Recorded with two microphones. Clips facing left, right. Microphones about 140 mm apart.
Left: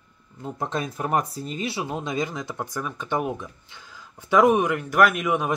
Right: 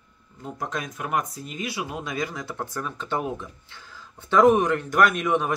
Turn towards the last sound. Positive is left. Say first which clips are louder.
# even
turn(degrees=10)  # may be behind; listen again after turning